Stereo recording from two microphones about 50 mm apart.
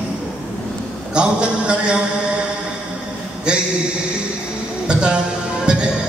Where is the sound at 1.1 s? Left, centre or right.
Centre.